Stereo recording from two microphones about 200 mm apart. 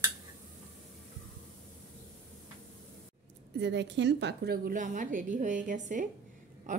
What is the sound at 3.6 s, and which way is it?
A woman's voice, 60° right (ahead or behind).